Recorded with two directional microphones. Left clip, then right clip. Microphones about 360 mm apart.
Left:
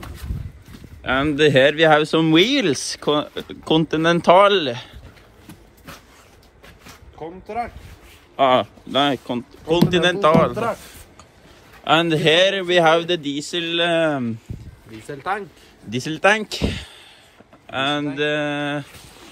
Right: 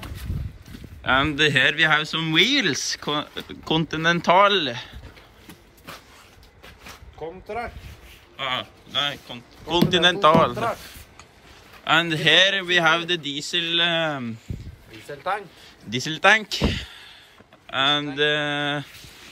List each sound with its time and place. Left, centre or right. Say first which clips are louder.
1.0 s speech: left 2 dB; centre
8.4 s speech: left 11 dB; centre
9.7 s speech: left 1 dB; centre
11.8 s speech: left 3 dB; centre
15.0 s speech: left 2 dB; left
15.9 s speech: even; centre